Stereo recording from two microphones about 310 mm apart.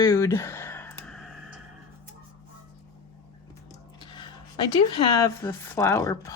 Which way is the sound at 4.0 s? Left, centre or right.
Centre.